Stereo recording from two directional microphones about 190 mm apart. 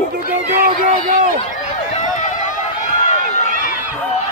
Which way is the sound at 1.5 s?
40° left (ahead or behind).